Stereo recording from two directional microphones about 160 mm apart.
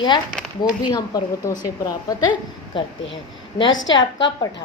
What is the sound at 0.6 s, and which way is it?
Speech, 25° left (ahead or behind).